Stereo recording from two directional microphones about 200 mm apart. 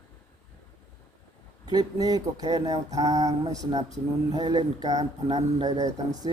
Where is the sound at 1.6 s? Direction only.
20° right (ahead or behind).